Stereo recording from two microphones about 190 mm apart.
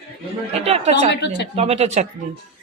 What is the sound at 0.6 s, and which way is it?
Speech, 35° right (ahead or behind).